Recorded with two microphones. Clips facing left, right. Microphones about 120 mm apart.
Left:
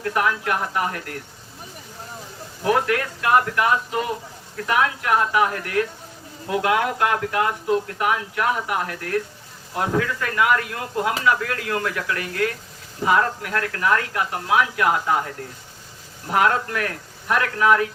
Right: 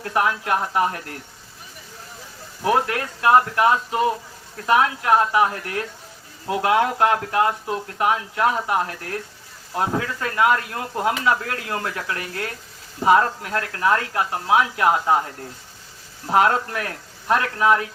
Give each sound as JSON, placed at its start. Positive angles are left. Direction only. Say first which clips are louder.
{"t": 0.0, "sound": "speech", "louder": "even", "side_deg": -25}
{"t": 2.6, "sound": "speech", "louder": "even", "side_deg": -25}
{"t": 16.3, "sound": "speech", "louder": "right 2 dB", "side_deg": -25}